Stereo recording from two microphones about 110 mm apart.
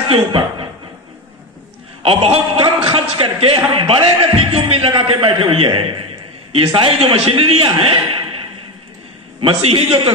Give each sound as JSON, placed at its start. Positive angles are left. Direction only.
{"t": 0.1, "sound": "speech", "side_deg": -50}
{"t": 2.0, "sound": "a man's voice", "side_deg": -60}
{"t": 7.0, "sound": "a man's voice", "side_deg": -60}
{"t": 9.4, "sound": "a man's voice", "side_deg": -60}